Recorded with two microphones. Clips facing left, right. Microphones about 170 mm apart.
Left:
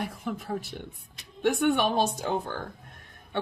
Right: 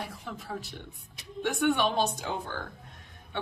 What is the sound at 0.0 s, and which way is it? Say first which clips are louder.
Speech: left 6 dB; 50° left (ahead or behind).